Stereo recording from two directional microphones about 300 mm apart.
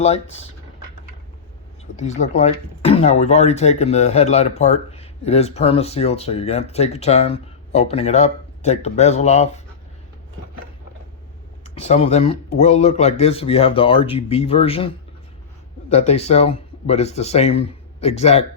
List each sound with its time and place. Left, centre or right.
0.0 s speech: left
2.0 s speech: left
11.6 s speech: left